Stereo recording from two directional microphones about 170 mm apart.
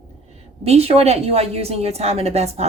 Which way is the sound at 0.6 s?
35° right (ahead or behind).